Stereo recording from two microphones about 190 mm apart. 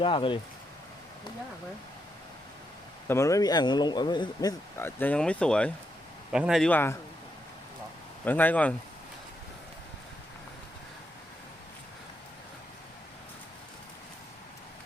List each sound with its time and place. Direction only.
0.0 s speech: 25° left (ahead or behind)
3.1 s a man's voice: 15° left (ahead or behind)
8.2 s speech: 10° left (ahead or behind)